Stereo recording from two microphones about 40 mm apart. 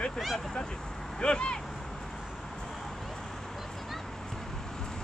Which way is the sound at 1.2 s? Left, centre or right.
Left.